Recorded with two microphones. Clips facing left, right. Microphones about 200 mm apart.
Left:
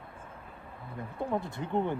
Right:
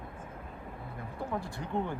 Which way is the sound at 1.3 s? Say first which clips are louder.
Left 4 dB; 20° left (ahead or behind).